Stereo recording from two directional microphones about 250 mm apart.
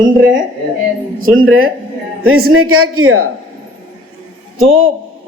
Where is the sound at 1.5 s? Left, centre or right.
Right.